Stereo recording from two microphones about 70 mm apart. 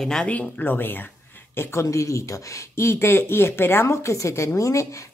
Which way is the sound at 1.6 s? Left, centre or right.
Left.